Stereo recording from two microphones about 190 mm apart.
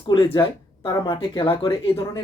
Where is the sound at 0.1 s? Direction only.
25° left (ahead or behind).